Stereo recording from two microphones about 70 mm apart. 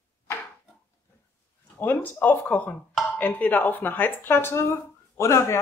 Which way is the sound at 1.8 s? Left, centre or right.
Left.